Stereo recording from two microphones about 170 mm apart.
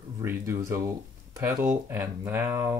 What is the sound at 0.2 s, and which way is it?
Speech, 15° right (ahead or behind).